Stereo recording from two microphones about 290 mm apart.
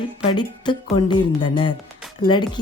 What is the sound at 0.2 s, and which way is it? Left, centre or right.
A woman's voice, centre.